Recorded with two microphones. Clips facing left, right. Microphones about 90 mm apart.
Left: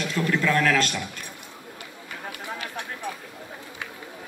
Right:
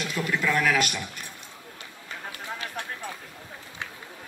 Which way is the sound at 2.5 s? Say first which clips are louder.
Even; 15° left (ahead or behind).